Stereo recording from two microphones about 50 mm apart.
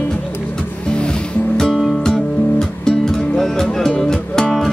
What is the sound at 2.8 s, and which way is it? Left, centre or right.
Music, centre.